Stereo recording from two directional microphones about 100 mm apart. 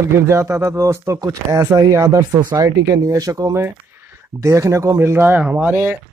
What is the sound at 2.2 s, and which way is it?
Speech, 45° right (ahead or behind).